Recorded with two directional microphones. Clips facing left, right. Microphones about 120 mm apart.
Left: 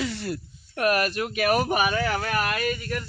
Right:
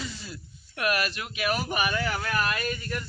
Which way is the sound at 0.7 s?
40° left (ahead or behind).